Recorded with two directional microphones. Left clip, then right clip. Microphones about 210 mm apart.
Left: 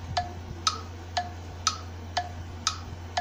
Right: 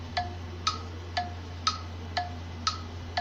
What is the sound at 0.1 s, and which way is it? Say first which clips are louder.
Tick-tock: left 2 dB; 20° left (ahead or behind).